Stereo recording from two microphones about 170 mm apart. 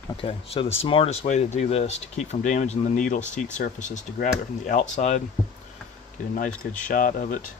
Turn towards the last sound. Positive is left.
turn(degrees=55)  # may be behind; listen again after turning